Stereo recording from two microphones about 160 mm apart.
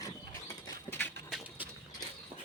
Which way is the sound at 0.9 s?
10° left (ahead or behind).